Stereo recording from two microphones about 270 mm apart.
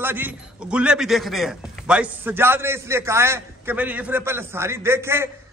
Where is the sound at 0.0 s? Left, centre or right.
Centre.